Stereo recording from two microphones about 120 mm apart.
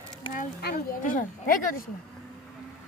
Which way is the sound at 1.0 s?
90° left.